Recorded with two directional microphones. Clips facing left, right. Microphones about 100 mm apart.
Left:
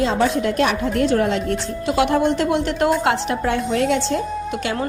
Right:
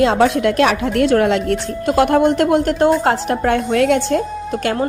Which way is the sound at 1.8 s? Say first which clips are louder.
Right 4 dB; 50° right (ahead or behind).